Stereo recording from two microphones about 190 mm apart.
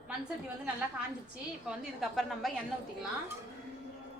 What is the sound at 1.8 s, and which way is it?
Speech, centre (ahead or behind).